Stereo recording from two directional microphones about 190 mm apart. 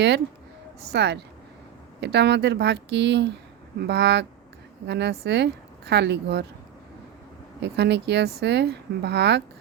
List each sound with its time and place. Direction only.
0.9 s a woman's voice: 60° right (ahead or behind)
7.6 s a woman's voice: 65° right (ahead or behind)